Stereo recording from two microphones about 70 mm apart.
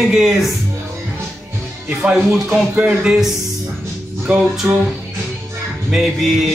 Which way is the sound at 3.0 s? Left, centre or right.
Centre.